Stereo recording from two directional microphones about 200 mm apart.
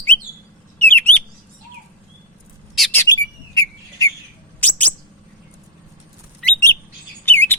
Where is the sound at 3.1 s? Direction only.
15° left (ahead or behind).